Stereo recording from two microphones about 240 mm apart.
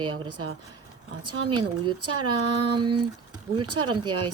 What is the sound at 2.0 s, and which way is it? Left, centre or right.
Speech, right.